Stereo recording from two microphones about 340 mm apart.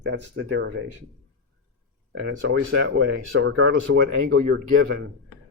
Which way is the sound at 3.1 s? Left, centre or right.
Right.